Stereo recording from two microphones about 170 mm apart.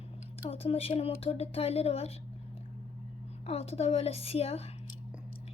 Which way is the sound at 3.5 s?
35° left (ahead or behind).